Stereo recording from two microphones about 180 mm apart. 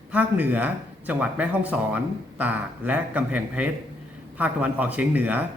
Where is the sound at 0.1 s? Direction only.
10° right (ahead or behind).